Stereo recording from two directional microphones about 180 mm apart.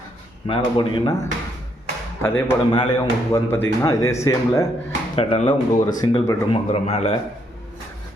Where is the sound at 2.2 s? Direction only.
15° left (ahead or behind).